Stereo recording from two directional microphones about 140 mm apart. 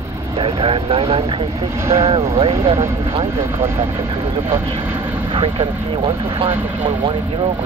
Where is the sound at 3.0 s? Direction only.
45° right (ahead or behind).